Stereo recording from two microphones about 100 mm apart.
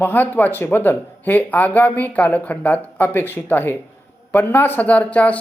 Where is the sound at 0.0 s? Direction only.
20° left (ahead or behind).